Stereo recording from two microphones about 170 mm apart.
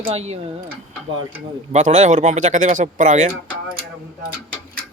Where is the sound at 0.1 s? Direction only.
35° right (ahead or behind).